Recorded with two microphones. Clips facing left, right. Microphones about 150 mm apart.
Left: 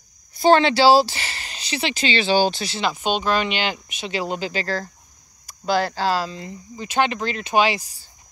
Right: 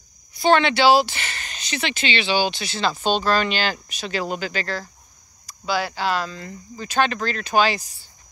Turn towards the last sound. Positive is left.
turn(degrees=25)  # may be behind; listen again after turning